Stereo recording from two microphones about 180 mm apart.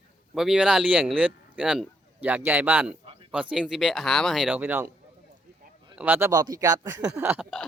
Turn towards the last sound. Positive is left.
turn(degrees=-10)  # may be behind; listen again after turning